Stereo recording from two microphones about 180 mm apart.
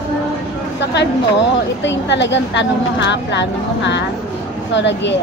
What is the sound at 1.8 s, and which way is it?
A woman's voice, 75° left (ahead or behind).